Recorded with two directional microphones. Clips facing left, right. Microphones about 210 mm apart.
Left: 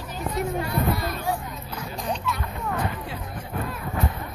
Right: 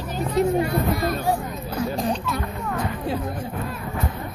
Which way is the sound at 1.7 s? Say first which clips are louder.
Right 7 dB; 35° right (ahead or behind).